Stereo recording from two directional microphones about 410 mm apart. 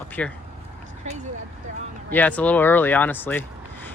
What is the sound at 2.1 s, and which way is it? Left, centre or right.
Speech, centre.